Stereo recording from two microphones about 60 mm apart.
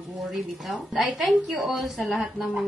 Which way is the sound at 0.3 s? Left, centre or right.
Centre.